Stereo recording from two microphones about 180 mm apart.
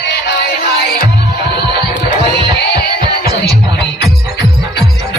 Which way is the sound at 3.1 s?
60° left (ahead or behind).